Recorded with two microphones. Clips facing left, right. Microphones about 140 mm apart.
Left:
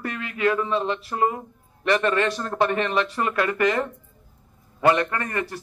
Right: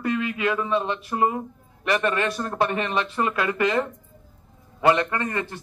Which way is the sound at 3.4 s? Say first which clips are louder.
Left 2 dB; 15° right (ahead or behind).